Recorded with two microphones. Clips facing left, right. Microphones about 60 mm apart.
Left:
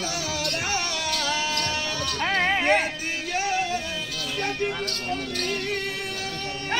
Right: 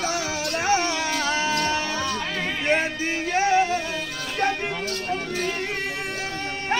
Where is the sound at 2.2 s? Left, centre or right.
Left.